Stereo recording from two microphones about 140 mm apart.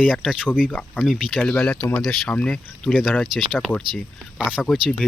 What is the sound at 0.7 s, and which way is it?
Speech, 10° left (ahead or behind).